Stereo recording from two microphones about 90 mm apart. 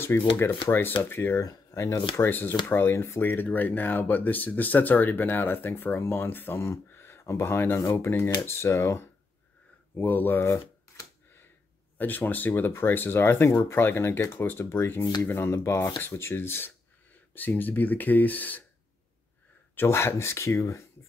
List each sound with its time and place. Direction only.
0.1 s speech: 25° left (ahead or behind)
1.4 s speech: 35° left (ahead or behind)
9.9 s speech: 20° left (ahead or behind)
12.0 s speech: 20° left (ahead or behind)
19.7 s speech: 25° left (ahead or behind)